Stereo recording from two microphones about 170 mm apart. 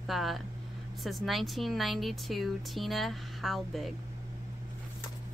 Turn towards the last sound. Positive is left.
turn(degrees=0)  # may be behind; listen again after turning